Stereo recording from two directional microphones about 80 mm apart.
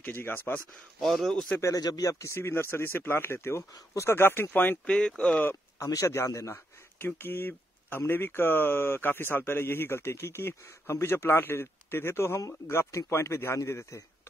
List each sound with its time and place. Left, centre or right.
0.0 s speech: left
1.0 s speech: centre
1.8 s speech: left; by 5.4 s centre
5.4 s a sound: left
5.9 s speech: left